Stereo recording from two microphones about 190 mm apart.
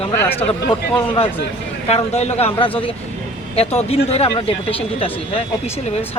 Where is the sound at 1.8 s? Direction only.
35° left (ahead or behind).